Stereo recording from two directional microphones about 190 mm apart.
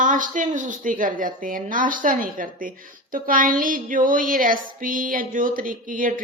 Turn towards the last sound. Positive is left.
turn(degrees=-45)  # may be behind; listen again after turning